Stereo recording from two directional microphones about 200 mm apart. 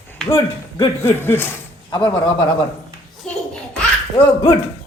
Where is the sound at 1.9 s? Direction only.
15° left (ahead or behind).